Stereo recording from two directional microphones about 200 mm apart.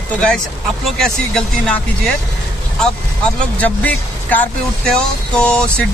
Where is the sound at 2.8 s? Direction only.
5° left (ahead or behind).